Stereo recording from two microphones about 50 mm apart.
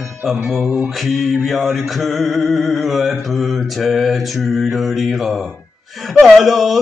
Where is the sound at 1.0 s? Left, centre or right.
Centre.